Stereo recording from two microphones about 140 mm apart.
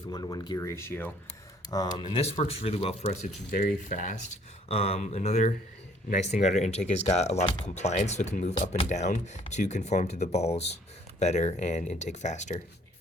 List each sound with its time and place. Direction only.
0.1 s speech: 25° left (ahead or behind)
1.7 s speech: 30° left (ahead or behind); by 3.2 s 50° left (ahead or behind)
3.8 s speech: 65° left (ahead or behind)
4.7 s speech: 45° left (ahead or behind)
8.5 s speech: 40° left (ahead or behind)
8.9 s speech: 55° left (ahead or behind)